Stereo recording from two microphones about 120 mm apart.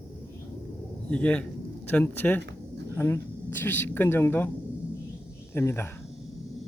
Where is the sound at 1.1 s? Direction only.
10° left (ahead or behind).